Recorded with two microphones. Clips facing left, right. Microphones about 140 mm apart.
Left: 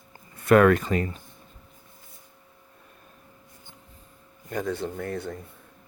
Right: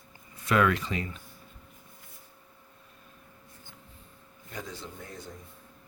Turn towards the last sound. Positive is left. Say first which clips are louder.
# left 12 dB
turn(degrees=65)  # may be behind; listen again after turning